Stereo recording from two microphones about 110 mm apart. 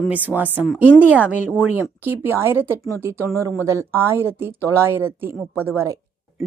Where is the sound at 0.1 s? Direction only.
15° right (ahead or behind).